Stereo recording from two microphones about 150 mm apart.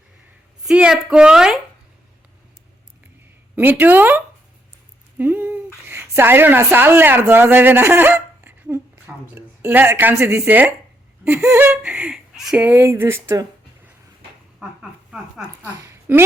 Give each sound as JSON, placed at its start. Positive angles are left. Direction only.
{"t": 0.6, "sound": "speech", "side_deg": -5}
{"t": 3.5, "sound": "speech", "side_deg": -15}
{"t": 14.6, "sound": "speech", "side_deg": -5}
{"t": 15.8, "sound": "a sound", "side_deg": -15}